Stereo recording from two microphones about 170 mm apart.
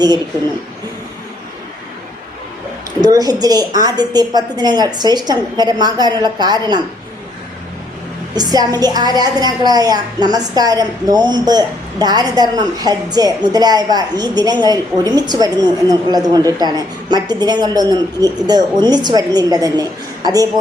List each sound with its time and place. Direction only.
3.0 s a woman's voice: 20° right (ahead or behind)
8.4 s a woman's voice: 25° right (ahead or behind)